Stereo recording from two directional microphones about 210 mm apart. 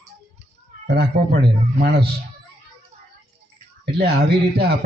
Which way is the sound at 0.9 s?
50° right (ahead or behind).